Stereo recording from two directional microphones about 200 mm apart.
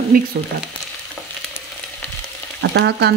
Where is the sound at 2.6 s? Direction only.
55° right (ahead or behind).